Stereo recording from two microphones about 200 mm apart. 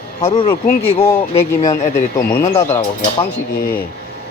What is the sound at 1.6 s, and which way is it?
Speech, 35° left (ahead or behind).